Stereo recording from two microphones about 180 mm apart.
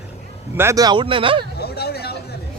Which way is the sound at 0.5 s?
15° right (ahead or behind).